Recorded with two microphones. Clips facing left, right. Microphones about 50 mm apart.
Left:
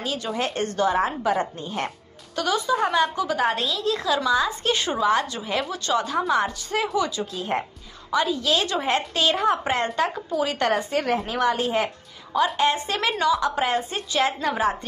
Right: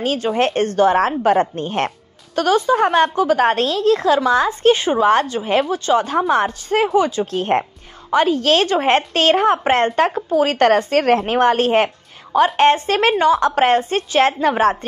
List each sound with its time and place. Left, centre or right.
0.0 s a woman's voice: right
2.3 s a woman's voice: right
7.3 s speech: right
8.1 s a woman's voice: right
12.7 s a woman's voice: right